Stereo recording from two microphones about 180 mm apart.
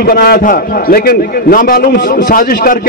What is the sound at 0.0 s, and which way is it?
A man's voice, 55° left (ahead or behind).